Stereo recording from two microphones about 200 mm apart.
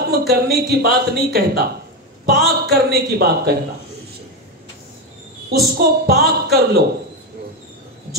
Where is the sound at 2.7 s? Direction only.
50° right (ahead or behind).